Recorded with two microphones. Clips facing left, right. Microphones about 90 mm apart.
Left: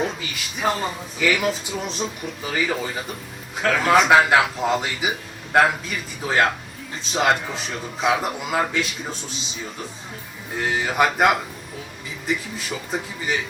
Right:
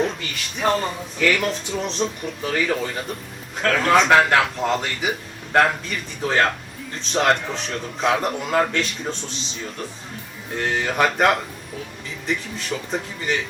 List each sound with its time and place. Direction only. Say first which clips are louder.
0.0 s speech: right 2 dB; 5° left (ahead or behind)